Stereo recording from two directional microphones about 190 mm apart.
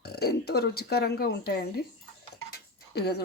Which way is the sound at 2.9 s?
60° left (ahead or behind).